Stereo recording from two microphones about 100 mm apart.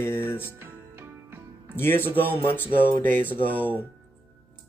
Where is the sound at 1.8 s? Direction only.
20° left (ahead or behind).